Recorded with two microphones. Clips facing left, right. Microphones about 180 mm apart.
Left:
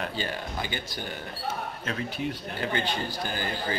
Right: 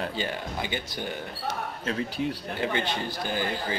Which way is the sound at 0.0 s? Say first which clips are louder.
Right 1 dB; 20° right (ahead or behind).